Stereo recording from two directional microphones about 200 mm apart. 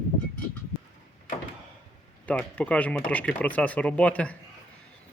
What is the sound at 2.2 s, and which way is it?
Speech, 5° left (ahead or behind).